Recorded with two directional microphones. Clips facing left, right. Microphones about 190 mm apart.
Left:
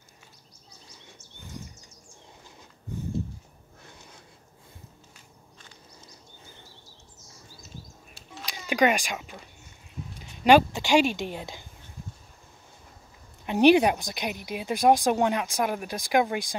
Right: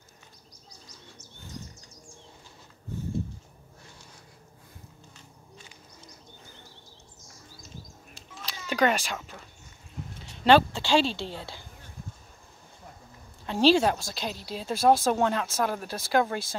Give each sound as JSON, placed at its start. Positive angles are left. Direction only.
{"t": 8.5, "sound": "speech", "side_deg": 15}
{"t": 13.5, "sound": "speech", "side_deg": 20}